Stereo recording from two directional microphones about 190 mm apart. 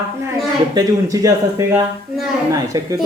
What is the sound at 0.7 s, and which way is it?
Speech, 20° right (ahead or behind).